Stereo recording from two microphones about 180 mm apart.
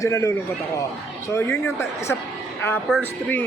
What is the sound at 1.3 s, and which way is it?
Speech, 15° left (ahead or behind).